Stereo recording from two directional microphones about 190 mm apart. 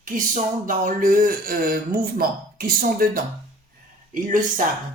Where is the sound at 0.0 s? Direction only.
45° right (ahead or behind).